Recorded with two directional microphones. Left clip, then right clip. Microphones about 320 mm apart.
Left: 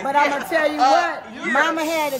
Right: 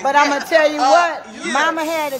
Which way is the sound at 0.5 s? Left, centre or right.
Centre.